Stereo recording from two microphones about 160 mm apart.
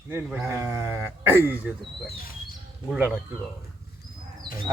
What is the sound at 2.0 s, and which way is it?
Speech, 70° left (ahead or behind).